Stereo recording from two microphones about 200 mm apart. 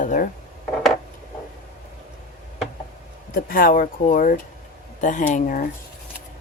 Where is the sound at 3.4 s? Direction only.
45° left (ahead or behind).